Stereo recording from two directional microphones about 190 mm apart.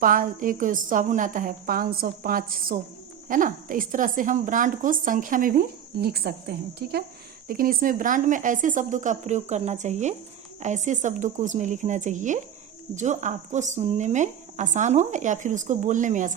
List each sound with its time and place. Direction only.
0.0 s a woman's voice: 45° right (ahead or behind)